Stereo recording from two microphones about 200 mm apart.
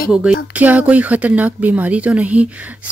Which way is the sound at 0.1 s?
5° right (ahead or behind).